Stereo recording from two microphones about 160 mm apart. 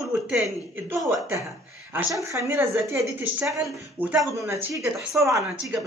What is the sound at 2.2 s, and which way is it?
Speech, 15° right (ahead or behind).